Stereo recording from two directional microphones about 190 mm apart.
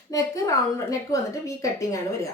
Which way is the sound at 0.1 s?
15° left (ahead or behind).